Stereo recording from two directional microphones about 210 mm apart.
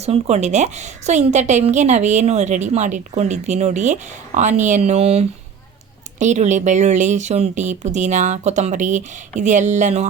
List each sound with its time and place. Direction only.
0.0 s a woman's voice: 30° right (ahead or behind)